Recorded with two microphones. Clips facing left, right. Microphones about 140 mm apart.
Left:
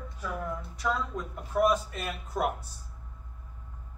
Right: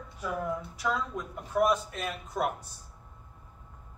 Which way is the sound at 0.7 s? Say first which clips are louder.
Left 3 dB; centre (ahead or behind).